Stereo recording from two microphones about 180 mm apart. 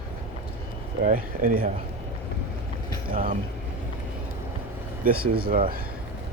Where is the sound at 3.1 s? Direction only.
50° right (ahead or behind).